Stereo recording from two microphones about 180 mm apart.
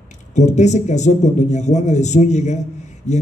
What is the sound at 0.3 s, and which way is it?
A man's voice, 40° left (ahead or behind).